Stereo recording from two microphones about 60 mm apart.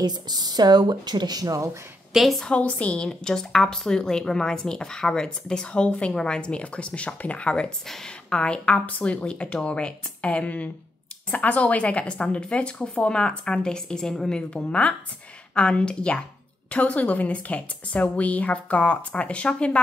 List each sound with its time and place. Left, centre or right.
0.4 s speech: right
2.1 s a woman's voice: centre
2.5 s a woman's voice: left